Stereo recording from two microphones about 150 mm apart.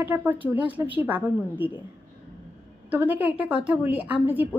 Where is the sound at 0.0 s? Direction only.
15° right (ahead or behind).